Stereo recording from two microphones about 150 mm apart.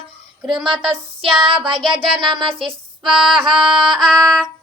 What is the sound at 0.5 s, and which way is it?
Music, 35° right (ahead or behind).